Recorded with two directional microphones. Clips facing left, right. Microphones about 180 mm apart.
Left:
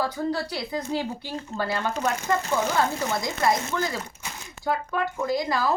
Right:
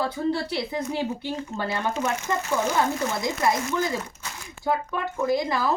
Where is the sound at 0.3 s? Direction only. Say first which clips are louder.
Right 2 dB; 25° right (ahead or behind).